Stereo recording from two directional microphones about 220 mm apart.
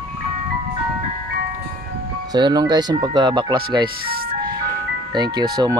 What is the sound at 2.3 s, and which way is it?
Speech, 20° right (ahead or behind).